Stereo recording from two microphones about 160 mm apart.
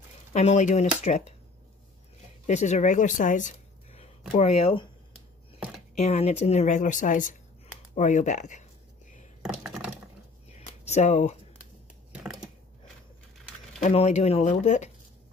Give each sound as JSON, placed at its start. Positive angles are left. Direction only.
{"t": 0.3, "sound": "a woman's voice", "side_deg": 45}
{"t": 2.4, "sound": "speech", "side_deg": 45}
{"t": 5.9, "sound": "a woman's voice", "side_deg": 45}
{"t": 9.4, "sound": "computer keyboard", "side_deg": -5}
{"t": 10.5, "sound": "a sound", "side_deg": 45}
{"t": 13.7, "sound": "a woman's voice", "side_deg": 40}